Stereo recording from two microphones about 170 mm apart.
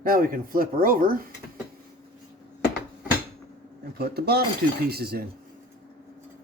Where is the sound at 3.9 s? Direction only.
70° right (ahead or behind).